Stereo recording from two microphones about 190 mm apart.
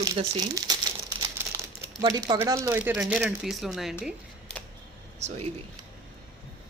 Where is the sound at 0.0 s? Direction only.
20° right (ahead or behind); by 3.9 s centre (ahead or behind).